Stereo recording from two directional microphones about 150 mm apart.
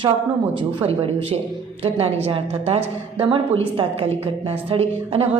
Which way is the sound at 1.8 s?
40° right (ahead or behind).